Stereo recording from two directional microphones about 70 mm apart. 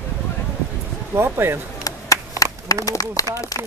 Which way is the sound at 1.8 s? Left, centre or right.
Left.